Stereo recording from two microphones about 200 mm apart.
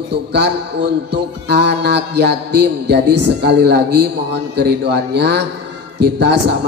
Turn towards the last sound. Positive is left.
turn(degrees=-55)  # may be behind; listen again after turning